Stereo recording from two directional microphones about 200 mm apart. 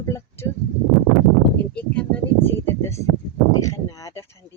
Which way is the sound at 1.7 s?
5° left (ahead or behind).